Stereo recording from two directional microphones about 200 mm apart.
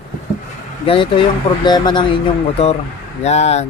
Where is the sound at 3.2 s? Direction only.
35° left (ahead or behind).